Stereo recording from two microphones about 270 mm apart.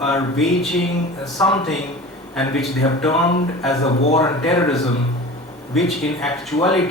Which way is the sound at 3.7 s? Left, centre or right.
Left.